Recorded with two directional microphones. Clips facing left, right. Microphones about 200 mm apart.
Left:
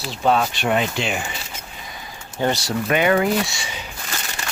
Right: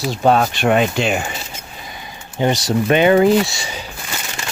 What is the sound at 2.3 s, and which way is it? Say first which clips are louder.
Speech: right 4 dB; 20° right (ahead or behind).